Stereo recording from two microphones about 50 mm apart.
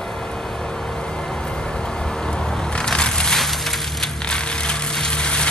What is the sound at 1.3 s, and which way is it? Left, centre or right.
Music, centre.